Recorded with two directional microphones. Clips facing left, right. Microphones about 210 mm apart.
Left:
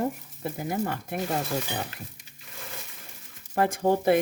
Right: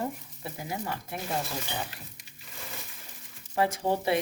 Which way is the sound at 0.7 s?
55° left (ahead or behind).